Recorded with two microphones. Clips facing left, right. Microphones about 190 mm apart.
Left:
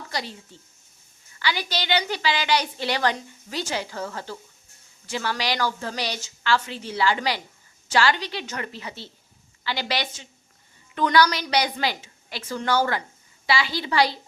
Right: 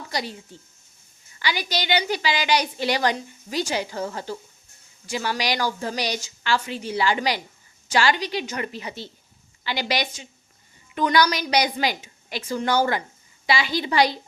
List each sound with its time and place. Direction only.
0.1 s speech: 15° right (ahead or behind)
1.4 s a woman's voice: 15° right (ahead or behind)